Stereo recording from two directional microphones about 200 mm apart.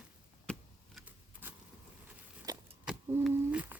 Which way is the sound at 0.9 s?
10° right (ahead or behind).